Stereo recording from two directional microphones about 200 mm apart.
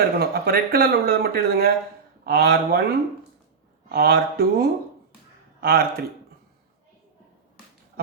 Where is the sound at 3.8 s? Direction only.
50° right (ahead or behind).